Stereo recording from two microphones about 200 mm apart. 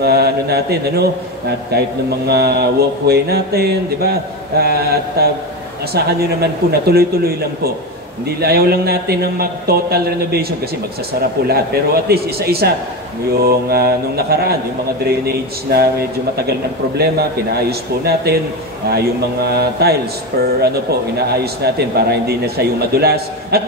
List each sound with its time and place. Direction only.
0.0 s speech: 50° right (ahead or behind)
17.0 s speech: 50° right (ahead or behind)
21.3 s speech: 50° right (ahead or behind)